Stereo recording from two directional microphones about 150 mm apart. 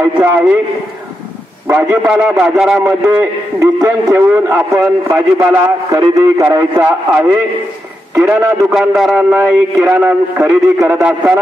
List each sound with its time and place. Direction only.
0.0 s a man's voice: 15° right (ahead or behind)
1.7 s a man's voice: 10° right (ahead or behind)
8.7 s a man's voice: 5° right (ahead or behind)
9.3 s a man's voice: 15° right (ahead or behind)